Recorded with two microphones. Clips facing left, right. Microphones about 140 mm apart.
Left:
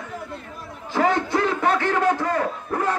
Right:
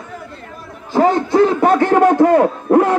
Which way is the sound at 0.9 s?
35° right (ahead or behind).